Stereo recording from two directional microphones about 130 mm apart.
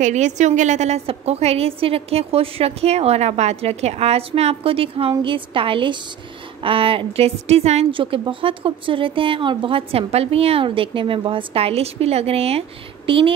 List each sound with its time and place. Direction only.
0.0 s a woman's voice: 65° right (ahead or behind)
7.9 s speech: 40° right (ahead or behind)